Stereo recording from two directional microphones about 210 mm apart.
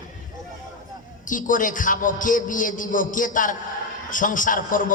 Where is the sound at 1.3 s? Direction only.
40° left (ahead or behind).